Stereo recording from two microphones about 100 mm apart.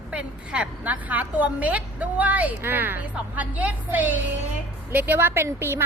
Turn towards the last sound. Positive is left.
turn(degrees=-25)  # may be behind; listen again after turning